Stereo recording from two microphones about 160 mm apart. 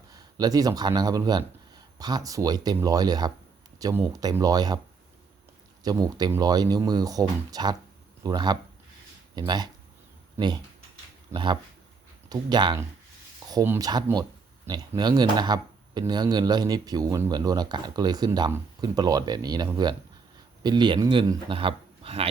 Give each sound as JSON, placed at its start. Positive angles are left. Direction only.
{"t": 0.1, "sound": "speech", "side_deg": -25}
{"t": 5.8, "sound": "speech", "side_deg": -25}